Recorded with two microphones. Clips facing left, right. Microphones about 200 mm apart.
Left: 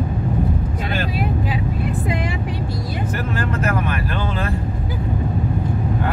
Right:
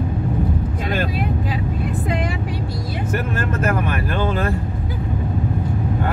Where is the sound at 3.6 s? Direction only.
50° right (ahead or behind).